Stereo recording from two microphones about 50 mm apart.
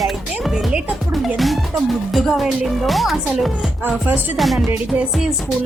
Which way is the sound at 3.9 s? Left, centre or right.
Right.